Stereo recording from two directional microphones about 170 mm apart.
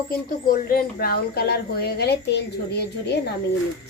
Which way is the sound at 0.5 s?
60° left (ahead or behind).